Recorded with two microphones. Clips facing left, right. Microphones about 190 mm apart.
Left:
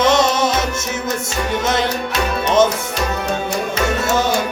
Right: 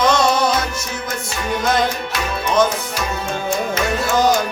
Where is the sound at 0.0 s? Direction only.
20° left (ahead or behind).